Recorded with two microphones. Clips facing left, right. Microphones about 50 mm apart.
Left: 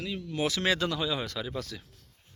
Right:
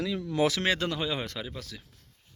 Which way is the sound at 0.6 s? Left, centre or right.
Right.